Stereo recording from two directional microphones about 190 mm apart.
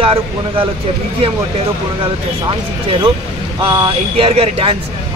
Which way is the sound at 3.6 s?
25° right (ahead or behind).